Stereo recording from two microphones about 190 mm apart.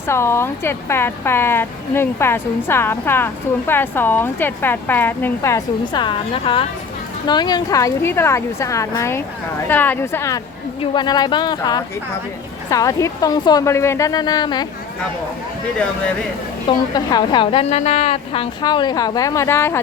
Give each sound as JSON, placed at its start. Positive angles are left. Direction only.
{"t": 0.1, "sound": "a woman's voice", "side_deg": 15}
{"t": 16.6, "sound": "a woman's voice", "side_deg": 20}